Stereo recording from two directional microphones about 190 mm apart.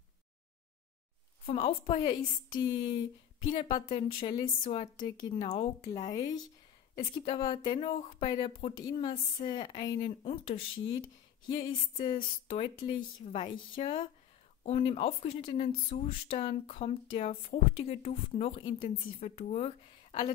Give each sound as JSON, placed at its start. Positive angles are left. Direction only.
{"t": 1.4, "sound": "speech", "side_deg": 30}
{"t": 3.7, "sound": "speech", "side_deg": 40}
{"t": 4.2, "sound": "speech", "side_deg": 25}
{"t": 10.0, "sound": "speech", "side_deg": 30}
{"t": 12.1, "sound": "speech", "side_deg": 30}